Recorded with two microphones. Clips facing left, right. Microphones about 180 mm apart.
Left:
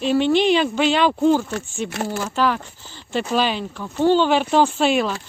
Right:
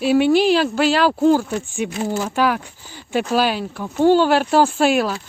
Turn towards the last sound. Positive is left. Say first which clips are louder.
# right 2 dB
turn(degrees=-5)  # may be behind; listen again after turning